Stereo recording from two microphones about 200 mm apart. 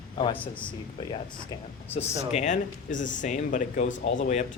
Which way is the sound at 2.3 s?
35° left (ahead or behind).